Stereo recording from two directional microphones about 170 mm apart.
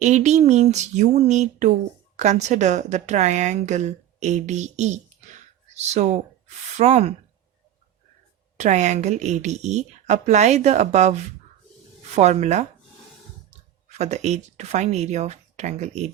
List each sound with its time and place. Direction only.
0.0 s speech: 45° right (ahead or behind)
8.5 s speech: 45° right (ahead or behind)
13.8 s speech: 40° right (ahead or behind)